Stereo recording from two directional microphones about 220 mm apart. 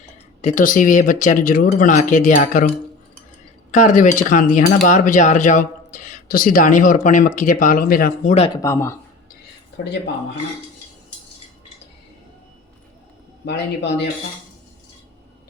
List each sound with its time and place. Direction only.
0.0 s speech: 35° left (ahead or behind)
8.6 s speech: 10° left (ahead or behind)
13.4 s a man's voice: 50° left (ahead or behind)